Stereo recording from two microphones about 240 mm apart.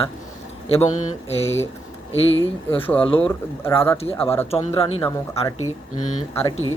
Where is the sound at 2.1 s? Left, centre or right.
Left.